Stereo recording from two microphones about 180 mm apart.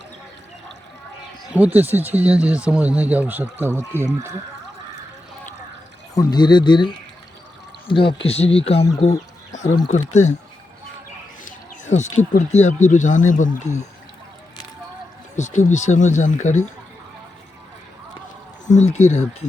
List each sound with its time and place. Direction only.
1.5 s speech: 10° right (ahead or behind)
6.1 s speech: 25° left (ahead or behind)
9.0 s a sound: 40° left (ahead or behind)
9.9 s speech: 40° left (ahead or behind)
11.4 s a sound: 40° left (ahead or behind)
12.5 s speech: 40° left (ahead or behind)
15.4 s speech: 40° left (ahead or behind)
18.6 s speech: 40° left (ahead or behind)